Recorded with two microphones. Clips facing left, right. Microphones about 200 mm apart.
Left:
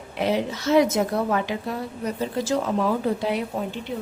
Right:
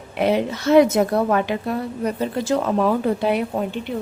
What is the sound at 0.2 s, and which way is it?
A woman's voice, 60° right (ahead or behind).